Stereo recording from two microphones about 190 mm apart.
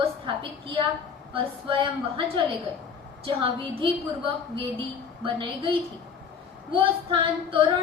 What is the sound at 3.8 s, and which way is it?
A woman's voice, 30° right (ahead or behind).